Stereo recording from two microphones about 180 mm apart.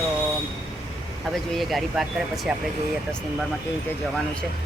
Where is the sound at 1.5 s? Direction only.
Centre (ahead or behind).